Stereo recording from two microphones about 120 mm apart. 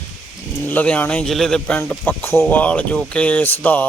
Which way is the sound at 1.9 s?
20° left (ahead or behind).